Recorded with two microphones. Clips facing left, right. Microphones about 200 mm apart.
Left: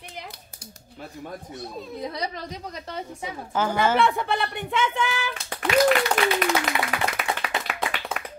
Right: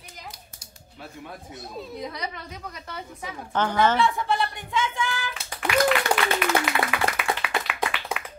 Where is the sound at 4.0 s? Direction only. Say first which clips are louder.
Left 1 dB; 60° left (ahead or behind).